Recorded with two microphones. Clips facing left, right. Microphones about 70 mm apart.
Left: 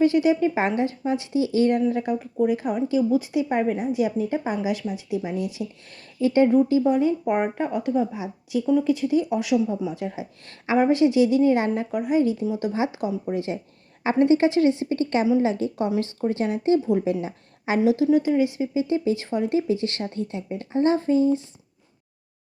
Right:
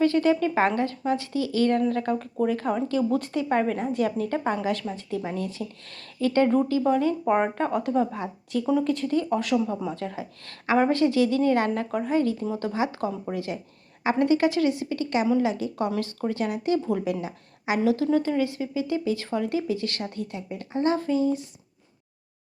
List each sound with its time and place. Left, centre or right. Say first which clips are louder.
0.0 s a woman's voice: left 2 dB; centre
12.7 s a woman's voice: left 2 dB; left